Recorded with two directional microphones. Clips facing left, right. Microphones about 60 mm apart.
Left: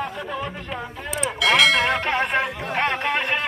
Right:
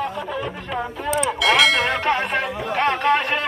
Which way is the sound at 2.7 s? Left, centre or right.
Centre.